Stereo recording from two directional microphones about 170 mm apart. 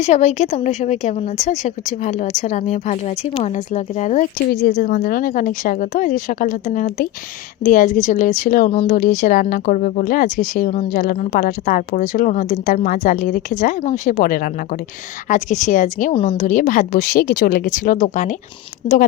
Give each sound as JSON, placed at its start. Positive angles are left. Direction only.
{"t": 0.0, "sound": "speech", "side_deg": 40}
{"t": 8.7, "sound": "speech", "side_deg": 40}
{"t": 16.1, "sound": "speech", "side_deg": 35}